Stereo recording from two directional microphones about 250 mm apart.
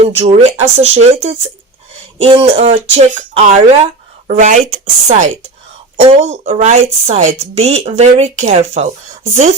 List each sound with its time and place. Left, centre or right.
0.0 s speech: right